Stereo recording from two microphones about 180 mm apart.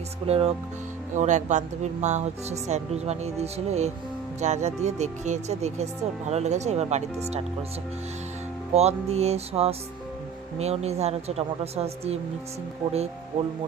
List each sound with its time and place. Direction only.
0.3 s speech: 35° right (ahead or behind)
8.7 s speech: 35° right (ahead or behind)